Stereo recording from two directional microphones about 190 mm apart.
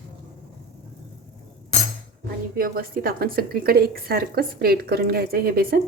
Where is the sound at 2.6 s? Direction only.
50° right (ahead or behind).